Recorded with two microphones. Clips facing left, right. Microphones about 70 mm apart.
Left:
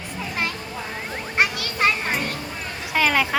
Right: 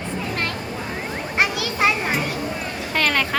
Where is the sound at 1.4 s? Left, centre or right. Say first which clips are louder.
Right 1 dB; centre.